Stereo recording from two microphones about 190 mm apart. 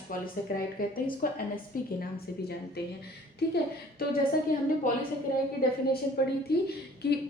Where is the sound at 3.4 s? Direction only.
60° left (ahead or behind).